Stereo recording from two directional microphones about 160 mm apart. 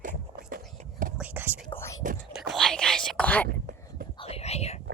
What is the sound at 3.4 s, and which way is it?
Whispering, 70° right (ahead or behind).